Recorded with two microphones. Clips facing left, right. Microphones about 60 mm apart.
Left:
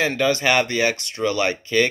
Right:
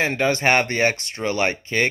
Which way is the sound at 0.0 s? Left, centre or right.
Right.